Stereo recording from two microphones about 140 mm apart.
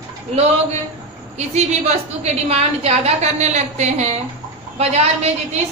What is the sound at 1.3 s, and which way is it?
A woman's voice, 55° right (ahead or behind).